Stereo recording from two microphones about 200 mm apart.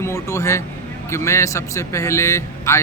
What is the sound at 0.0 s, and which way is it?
Speech, 15° left (ahead or behind).